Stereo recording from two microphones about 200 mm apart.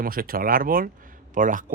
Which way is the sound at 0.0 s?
45° right (ahead or behind).